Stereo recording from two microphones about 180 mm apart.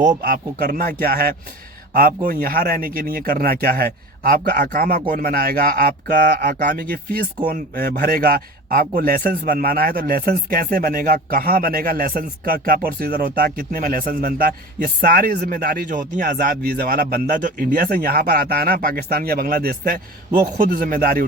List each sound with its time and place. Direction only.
0.2 s speech: 55° right (ahead or behind)
16.3 s speech: 60° right (ahead or behind)